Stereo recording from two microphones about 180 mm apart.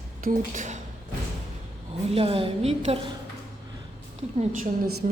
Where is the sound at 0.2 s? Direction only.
45° right (ahead or behind).